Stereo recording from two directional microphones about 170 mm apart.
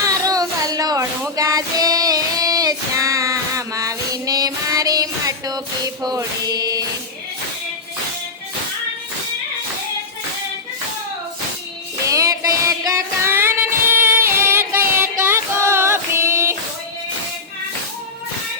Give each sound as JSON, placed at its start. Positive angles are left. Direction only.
{"t": 0.0, "sound": "music", "side_deg": -20}
{"t": 12.0, "sound": "child singing", "side_deg": -20}